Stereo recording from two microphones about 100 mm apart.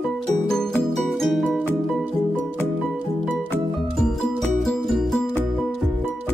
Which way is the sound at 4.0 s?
5° left (ahead or behind).